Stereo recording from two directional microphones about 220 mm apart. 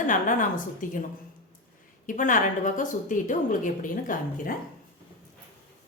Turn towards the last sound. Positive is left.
turn(degrees=40)  # may be behind; listen again after turning